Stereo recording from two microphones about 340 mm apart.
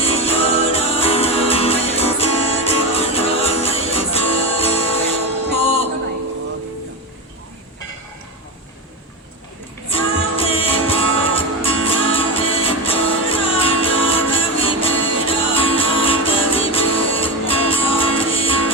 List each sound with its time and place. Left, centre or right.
0.0 s music: centre
9.9 s music: centre